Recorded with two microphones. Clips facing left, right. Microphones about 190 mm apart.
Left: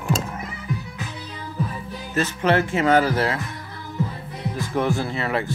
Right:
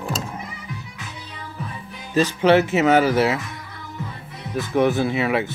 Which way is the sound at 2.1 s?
20° right (ahead or behind).